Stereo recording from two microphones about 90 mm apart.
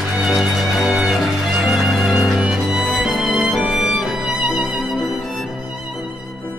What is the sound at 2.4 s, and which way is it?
Violin, 5° right (ahead or behind).